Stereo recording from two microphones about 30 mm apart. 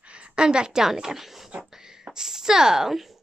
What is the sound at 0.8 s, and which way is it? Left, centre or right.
Speech, centre.